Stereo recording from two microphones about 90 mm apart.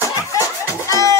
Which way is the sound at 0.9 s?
40° left (ahead or behind).